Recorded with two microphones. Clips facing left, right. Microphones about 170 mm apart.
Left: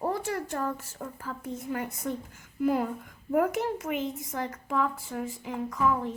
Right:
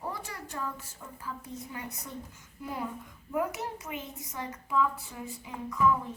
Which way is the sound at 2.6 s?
80° left.